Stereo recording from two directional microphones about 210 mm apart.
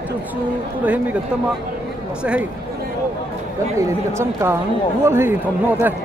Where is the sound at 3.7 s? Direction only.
15° right (ahead or behind).